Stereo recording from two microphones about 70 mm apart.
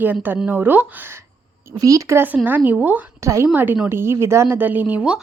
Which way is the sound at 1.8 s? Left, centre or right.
Right.